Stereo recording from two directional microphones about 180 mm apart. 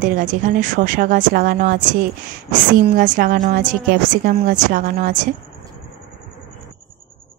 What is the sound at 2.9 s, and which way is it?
A woman's voice, 50° right (ahead or behind).